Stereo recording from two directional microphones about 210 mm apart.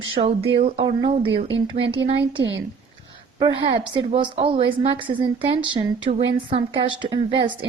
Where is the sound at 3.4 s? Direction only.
20° right (ahead or behind).